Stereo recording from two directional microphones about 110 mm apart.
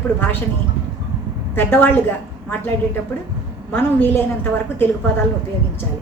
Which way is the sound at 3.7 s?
20° left (ahead or behind).